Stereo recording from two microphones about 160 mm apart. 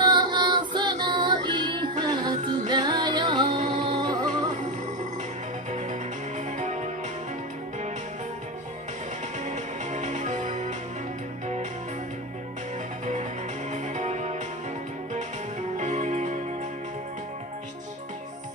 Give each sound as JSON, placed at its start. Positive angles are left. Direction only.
{"t": 0.0, "sound": "music", "side_deg": -30}
{"t": 5.7, "sound": "music", "side_deg": -45}
{"t": 9.4, "sound": "music", "side_deg": -50}
{"t": 13.0, "sound": "music", "side_deg": -50}
{"t": 15.8, "sound": "music", "side_deg": -45}